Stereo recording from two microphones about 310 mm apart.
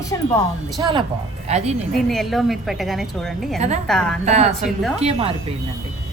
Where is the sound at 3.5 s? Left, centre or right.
Right.